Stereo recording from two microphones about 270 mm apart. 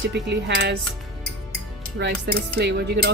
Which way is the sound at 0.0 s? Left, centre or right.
Right.